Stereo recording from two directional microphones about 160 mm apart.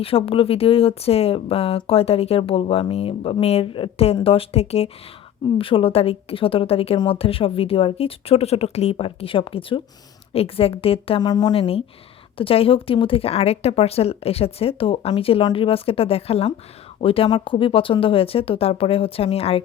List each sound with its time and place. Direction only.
0.0 s speech: 35° left (ahead or behind)